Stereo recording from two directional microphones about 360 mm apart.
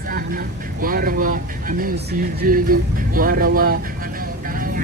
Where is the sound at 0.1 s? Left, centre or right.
Right.